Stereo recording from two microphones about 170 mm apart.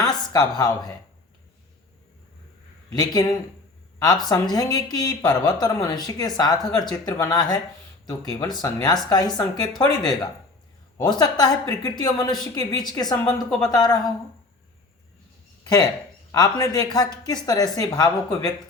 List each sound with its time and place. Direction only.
0.1 s speech: 25° left (ahead or behind)
3.1 s speech: 25° left (ahead or behind)
10.9 s speech: 25° left (ahead or behind)
15.6 s speech: 25° left (ahead or behind)